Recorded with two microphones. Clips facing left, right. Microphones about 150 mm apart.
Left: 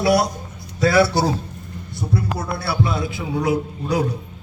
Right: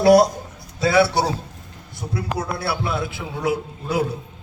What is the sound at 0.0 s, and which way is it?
Speech, 45° right (ahead or behind).